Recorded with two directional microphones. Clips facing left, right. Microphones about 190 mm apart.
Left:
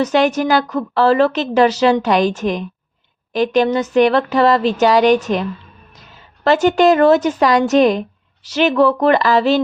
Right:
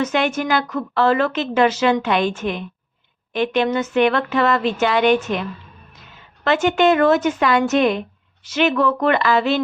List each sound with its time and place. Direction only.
0.0 s a woman's voice: 35° left (ahead or behind)